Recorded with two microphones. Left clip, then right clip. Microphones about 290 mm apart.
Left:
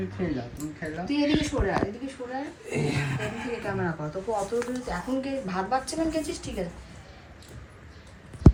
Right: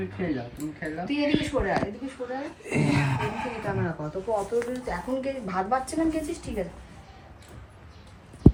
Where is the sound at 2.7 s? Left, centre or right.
Right.